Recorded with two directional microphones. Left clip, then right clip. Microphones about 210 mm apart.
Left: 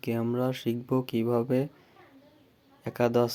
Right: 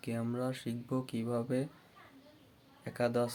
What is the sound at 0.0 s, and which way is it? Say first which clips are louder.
Speech: left 8 dB; 30° left (ahead or behind).